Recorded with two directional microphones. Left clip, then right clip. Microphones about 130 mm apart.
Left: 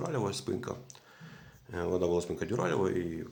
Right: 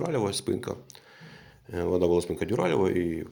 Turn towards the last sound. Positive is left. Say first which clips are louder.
# right 6 dB
turn(degrees=-35)  # may be behind; listen again after turning